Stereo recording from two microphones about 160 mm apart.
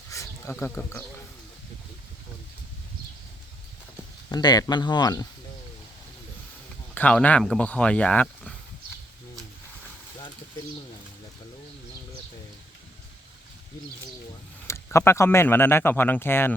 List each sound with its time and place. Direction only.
0.1 s a sound: 20° left (ahead or behind)
4.3 s speech: 25° left (ahead or behind)
6.9 s speech: 10° left (ahead or behind)
14.7 s speech: 15° left (ahead or behind)